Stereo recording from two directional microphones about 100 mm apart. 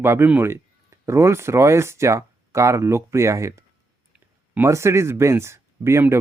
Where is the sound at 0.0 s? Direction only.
25° right (ahead or behind).